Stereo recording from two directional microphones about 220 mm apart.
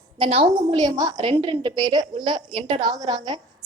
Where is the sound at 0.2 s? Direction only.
25° right (ahead or behind).